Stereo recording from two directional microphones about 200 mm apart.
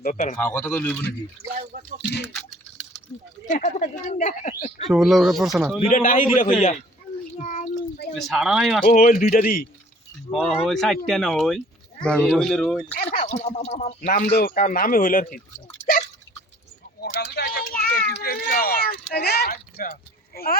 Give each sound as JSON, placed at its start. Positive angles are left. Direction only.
{"t": 0.0, "sound": "a woman's voice", "side_deg": 40}
{"t": 0.3, "sound": "speech", "side_deg": 10}
{"t": 3.4, "sound": "a woman's voice", "side_deg": 35}
{"t": 4.9, "sound": "speech", "side_deg": 0}
{"t": 5.9, "sound": "a woman's voice", "side_deg": 40}
{"t": 7.4, "sound": "a sound", "side_deg": 40}
{"t": 8.3, "sound": "speech", "side_deg": -5}
{"t": 8.9, "sound": "speech", "side_deg": 40}
{"t": 10.3, "sound": "speech", "side_deg": 0}
{"t": 13.0, "sound": "speech", "side_deg": 30}
{"t": 17.0, "sound": "a sound", "side_deg": 55}
{"t": 19.7, "sound": "speech", "side_deg": 45}